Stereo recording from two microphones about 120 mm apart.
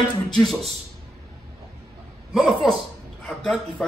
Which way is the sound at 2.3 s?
Centre (ahead or behind).